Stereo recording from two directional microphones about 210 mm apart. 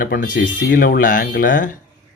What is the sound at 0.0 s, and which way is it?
Speech, 40° left (ahead or behind).